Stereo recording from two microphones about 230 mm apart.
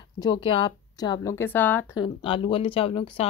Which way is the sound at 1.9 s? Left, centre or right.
Left.